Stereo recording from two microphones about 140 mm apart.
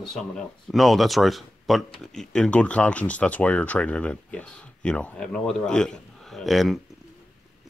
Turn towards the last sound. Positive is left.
turn(degrees=0)  # may be behind; listen again after turning